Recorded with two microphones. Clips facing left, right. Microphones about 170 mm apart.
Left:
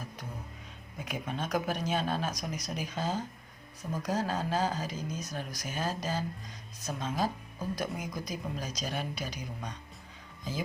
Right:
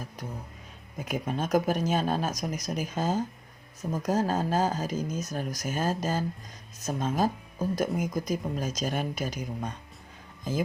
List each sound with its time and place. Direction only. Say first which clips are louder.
0.9 s speech: right 6 dB; 40° right (ahead or behind)